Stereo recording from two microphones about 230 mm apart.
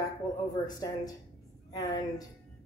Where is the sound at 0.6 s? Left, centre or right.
Centre.